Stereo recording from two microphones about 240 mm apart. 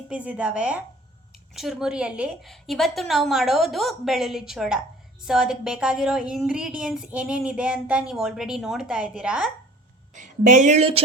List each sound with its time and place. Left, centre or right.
0.1 s a woman's voice: centre
10.2 s speech: right